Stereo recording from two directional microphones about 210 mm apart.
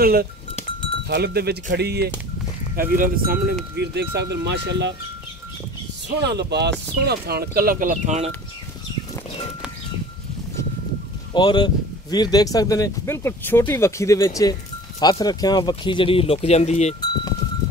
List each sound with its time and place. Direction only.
0.0 s speech: 45° right (ahead or behind)
6.2 s speech: 55° right (ahead or behind); by 8.3 s 35° right (ahead or behind)
11.3 s speech: 20° left (ahead or behind)